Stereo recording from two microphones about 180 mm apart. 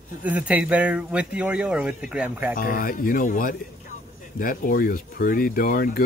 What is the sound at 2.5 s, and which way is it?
Speech, 50° left (ahead or behind).